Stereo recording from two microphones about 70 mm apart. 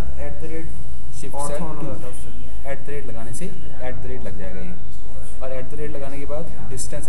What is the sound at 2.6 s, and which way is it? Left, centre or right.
A man's voice, centre.